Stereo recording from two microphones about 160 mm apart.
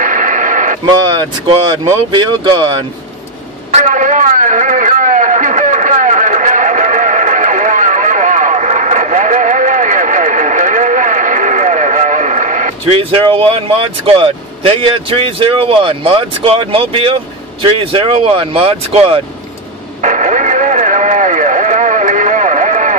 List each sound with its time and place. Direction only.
0.0 s radio: 55° right (ahead or behind)
1.7 s speech: 30° right (ahead or behind)
3.7 s a sound: 50° right (ahead or behind)
14.0 s speech: 35° right (ahead or behind)
20.0 s radio: 50° right (ahead or behind)